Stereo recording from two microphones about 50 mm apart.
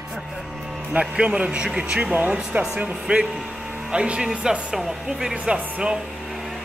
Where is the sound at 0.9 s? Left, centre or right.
Right.